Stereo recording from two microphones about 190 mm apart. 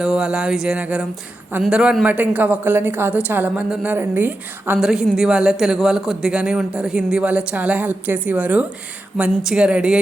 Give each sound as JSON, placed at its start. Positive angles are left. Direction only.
{"t": 0.0, "sound": "music", "side_deg": -5}
{"t": 1.5, "sound": "a woman's voice", "side_deg": -5}
{"t": 9.1, "sound": "music", "side_deg": -5}